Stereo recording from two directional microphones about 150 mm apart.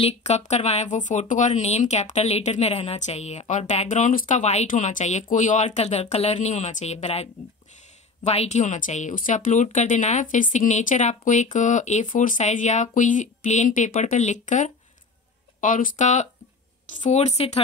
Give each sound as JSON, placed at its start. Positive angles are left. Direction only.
{"t": 0.0, "sound": "a woman's voice", "side_deg": 45}